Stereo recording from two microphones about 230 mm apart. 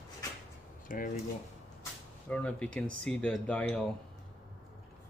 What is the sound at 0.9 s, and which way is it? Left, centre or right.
Speech, left.